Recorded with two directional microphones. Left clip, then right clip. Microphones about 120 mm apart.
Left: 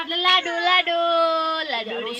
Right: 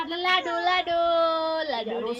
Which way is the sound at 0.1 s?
10° left (ahead or behind).